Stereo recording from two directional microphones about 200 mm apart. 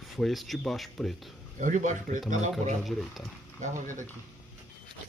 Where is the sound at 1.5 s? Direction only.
40° right (ahead or behind).